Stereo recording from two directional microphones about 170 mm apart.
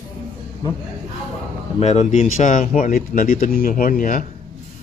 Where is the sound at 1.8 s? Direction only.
40° left (ahead or behind).